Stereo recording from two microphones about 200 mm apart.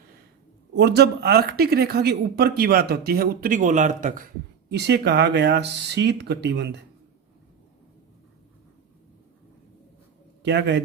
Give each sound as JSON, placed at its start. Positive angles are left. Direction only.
{"t": 0.8, "sound": "speech", "side_deg": -55}
{"t": 4.7, "sound": "speech", "side_deg": -55}
{"t": 10.4, "sound": "speech", "side_deg": -60}